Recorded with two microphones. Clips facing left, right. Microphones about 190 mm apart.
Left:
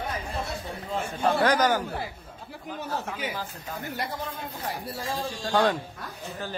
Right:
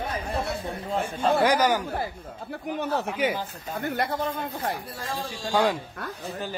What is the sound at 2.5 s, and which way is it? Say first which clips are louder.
Speech: right 6 dB; 65° right (ahead or behind).